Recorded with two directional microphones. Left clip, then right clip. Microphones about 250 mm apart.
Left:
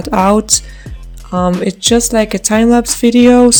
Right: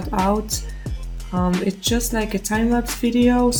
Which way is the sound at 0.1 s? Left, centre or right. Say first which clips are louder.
Left 10 dB; left.